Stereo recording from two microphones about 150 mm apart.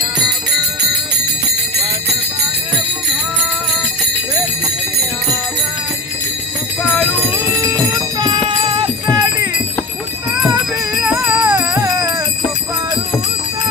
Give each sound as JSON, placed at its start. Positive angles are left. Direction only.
{"t": 7.9, "sound": "music", "side_deg": -25}
{"t": 8.6, "sound": "jingle bell", "side_deg": -35}
{"t": 11.2, "sound": "music", "side_deg": -10}